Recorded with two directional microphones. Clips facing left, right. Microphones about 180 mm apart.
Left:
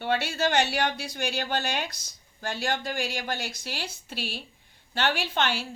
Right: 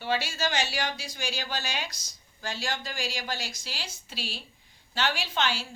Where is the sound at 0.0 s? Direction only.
60° left (ahead or behind).